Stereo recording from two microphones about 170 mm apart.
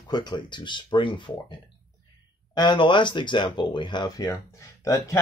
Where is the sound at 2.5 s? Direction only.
25° left (ahead or behind).